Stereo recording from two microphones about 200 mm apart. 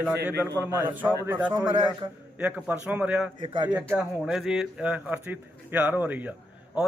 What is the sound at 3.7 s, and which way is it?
A man's voice, 5° right (ahead or behind).